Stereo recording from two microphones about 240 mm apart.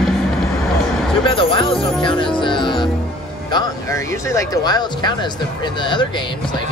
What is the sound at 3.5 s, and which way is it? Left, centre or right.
Speech, centre.